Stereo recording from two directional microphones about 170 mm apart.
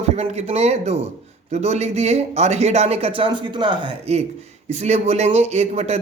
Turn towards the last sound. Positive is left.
turn(degrees=-40)  # may be behind; listen again after turning